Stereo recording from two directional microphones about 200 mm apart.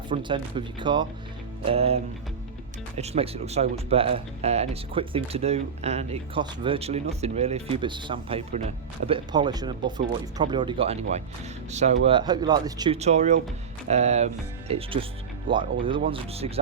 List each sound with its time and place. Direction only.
0.1 s speech: 25° right (ahead or behind)
3.0 s speech: 30° right (ahead or behind)
12.9 s speech: 35° right (ahead or behind)